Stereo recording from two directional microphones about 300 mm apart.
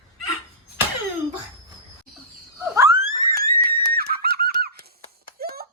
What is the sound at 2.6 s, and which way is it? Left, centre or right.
Frog, centre.